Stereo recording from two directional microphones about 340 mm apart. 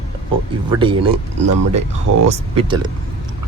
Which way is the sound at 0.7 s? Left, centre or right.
Centre.